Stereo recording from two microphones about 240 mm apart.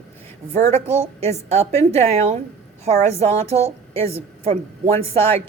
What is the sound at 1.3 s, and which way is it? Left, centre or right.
A woman's voice, right.